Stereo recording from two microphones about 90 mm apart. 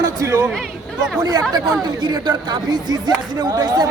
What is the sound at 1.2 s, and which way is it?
A man's voice, 45° right (ahead or behind).